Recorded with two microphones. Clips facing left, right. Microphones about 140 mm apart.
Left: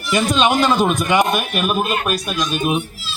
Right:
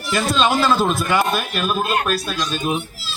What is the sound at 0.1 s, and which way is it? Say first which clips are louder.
A man's voice: left 2 dB; 15° left (ahead or behind).